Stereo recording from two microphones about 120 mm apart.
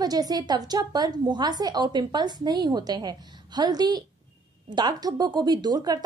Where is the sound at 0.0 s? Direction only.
30° right (ahead or behind).